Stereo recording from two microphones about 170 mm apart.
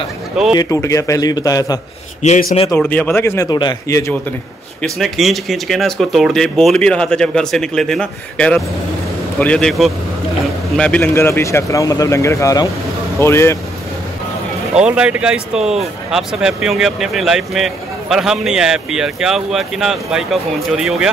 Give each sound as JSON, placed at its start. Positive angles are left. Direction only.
{"t": 0.6, "sound": "speech", "side_deg": 20}
{"t": 2.2, "sound": "speech", "side_deg": 45}
{"t": 2.9, "sound": "speech", "side_deg": 10}
{"t": 3.4, "sound": "speech", "side_deg": 25}
{"t": 4.8, "sound": "a man's voice", "side_deg": 0}
{"t": 14.8, "sound": "a man's voice", "side_deg": -5}